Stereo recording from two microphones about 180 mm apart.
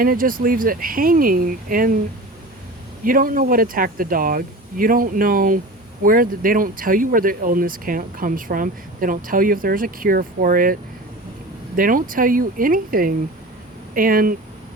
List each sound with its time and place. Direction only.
0.0 s speech: 50° right (ahead or behind)
3.0 s speech: 50° right (ahead or behind)
11.8 s speech: 50° right (ahead or behind)